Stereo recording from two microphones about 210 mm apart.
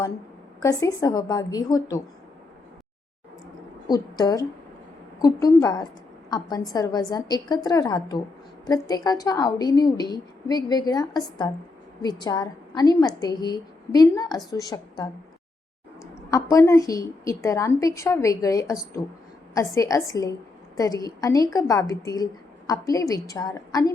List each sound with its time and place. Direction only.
0.6 s a woman's voice: 15° left (ahead or behind)
3.8 s a woman's voice: 20° left (ahead or behind)
16.3 s a woman's voice: 15° left (ahead or behind)